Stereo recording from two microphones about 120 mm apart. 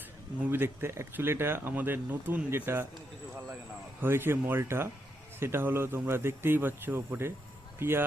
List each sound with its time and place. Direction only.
0.5 s speech: 20° right (ahead or behind)
4.0 s speech: 20° right (ahead or behind)